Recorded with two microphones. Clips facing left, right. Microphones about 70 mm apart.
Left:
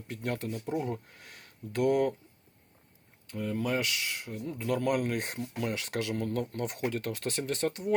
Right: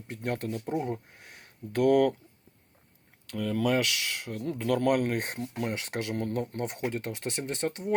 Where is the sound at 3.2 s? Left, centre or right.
Right.